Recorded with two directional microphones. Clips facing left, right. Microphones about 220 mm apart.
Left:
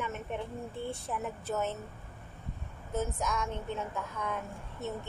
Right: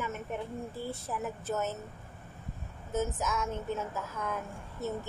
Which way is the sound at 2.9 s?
5° right (ahead or behind).